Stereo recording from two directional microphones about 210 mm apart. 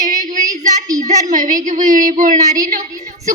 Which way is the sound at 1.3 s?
40° right (ahead or behind).